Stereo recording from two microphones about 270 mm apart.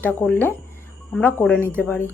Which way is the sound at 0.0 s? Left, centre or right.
Centre.